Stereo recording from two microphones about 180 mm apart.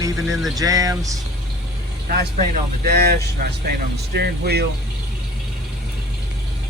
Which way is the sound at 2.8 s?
60° right (ahead or behind).